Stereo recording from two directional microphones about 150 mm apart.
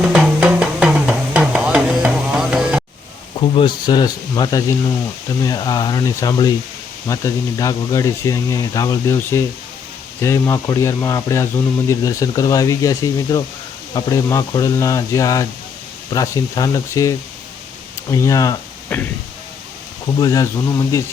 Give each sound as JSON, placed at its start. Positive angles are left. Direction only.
{"t": 0.0, "sound": "music", "side_deg": -5}
{"t": 3.5, "sound": "speech", "side_deg": 35}
{"t": 20.1, "sound": "speech", "side_deg": 25}